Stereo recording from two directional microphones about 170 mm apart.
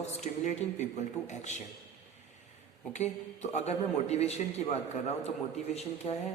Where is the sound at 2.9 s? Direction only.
40° left (ahead or behind).